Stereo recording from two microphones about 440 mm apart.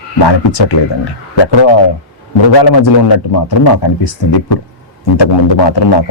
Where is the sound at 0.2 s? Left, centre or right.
Left.